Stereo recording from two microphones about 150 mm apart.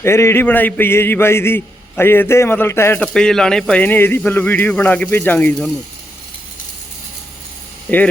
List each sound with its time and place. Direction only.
0.0 s a man's voice: 15° left (ahead or behind)
3.0 s a man's voice: 5° left (ahead or behind)
7.9 s a man's voice: 10° left (ahead or behind)